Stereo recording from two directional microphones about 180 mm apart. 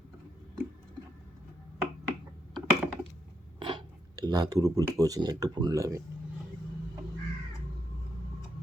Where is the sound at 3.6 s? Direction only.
25° right (ahead or behind).